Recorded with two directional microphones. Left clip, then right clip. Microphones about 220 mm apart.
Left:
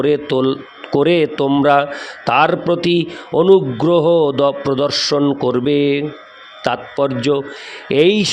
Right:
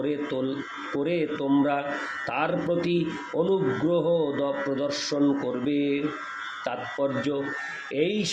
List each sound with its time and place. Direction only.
0.0 s speech: 50° left (ahead or behind)